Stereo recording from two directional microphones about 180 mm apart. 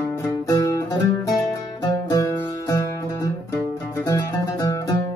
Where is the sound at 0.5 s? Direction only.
20° left (ahead or behind).